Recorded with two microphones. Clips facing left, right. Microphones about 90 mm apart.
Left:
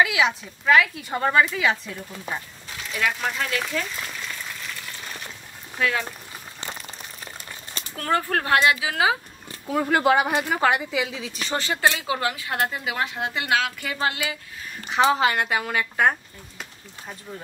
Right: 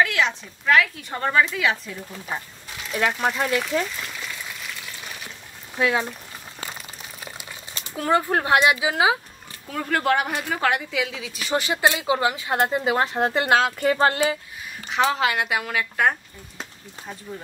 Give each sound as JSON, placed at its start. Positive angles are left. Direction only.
{"t": 0.0, "sound": "a woman's voice", "side_deg": 5}
{"t": 3.1, "sound": "speech", "side_deg": -20}
{"t": 4.0, "sound": "a sound", "side_deg": 0}
{"t": 5.8, "sound": "speech", "side_deg": -20}
{"t": 7.9, "sound": "speech", "side_deg": -15}
{"t": 9.7, "sound": "a woman's voice", "side_deg": 10}
{"t": 11.5, "sound": "speech", "side_deg": -15}
{"t": 12.8, "sound": "a woman's voice", "side_deg": -35}
{"t": 14.9, "sound": "a woman's voice", "side_deg": 5}